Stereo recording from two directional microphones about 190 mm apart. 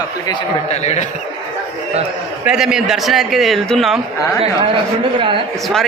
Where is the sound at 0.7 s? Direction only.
35° left (ahead or behind).